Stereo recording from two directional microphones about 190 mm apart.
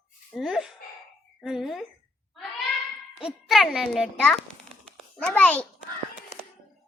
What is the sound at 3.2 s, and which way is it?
A child's voice, centre (ahead or behind).